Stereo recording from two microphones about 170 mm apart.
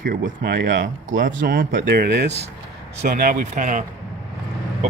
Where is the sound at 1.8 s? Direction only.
80° right.